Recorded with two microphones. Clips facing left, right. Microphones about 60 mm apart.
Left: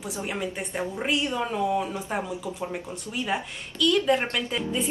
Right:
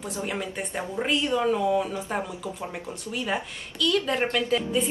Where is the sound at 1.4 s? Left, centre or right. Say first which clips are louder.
Right 2 dB; centre.